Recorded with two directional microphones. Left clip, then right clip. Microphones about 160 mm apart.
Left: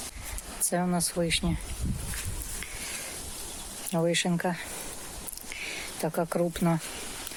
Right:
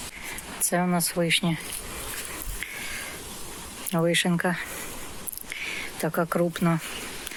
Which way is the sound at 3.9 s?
Centre (ahead or behind).